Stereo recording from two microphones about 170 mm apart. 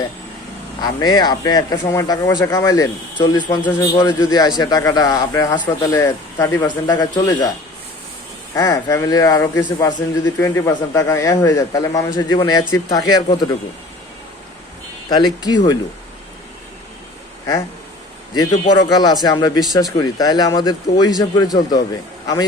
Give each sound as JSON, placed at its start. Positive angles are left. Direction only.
{"t": 0.8, "sound": "speech", "side_deg": 25}
{"t": 8.5, "sound": "speech", "side_deg": 20}
{"t": 15.1, "sound": "speech", "side_deg": 25}
{"t": 18.8, "sound": "speech", "side_deg": 20}